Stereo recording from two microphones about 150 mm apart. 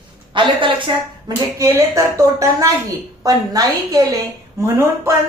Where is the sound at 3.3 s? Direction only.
25° right (ahead or behind).